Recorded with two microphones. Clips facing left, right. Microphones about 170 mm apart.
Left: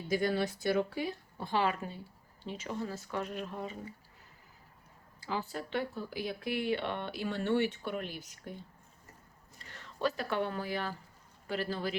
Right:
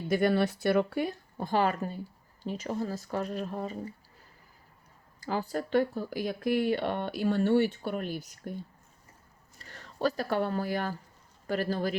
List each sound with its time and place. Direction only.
0.1 s speech: 60° right (ahead or behind); by 3.8 s 40° right (ahead or behind)
5.2 s speech: 45° right (ahead or behind)
9.6 s speech: 40° right (ahead or behind)